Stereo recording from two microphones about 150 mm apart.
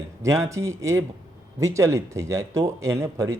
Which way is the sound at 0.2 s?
20° right (ahead or behind).